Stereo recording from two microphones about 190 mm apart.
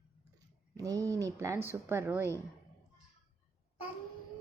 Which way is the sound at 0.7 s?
20° right (ahead or behind).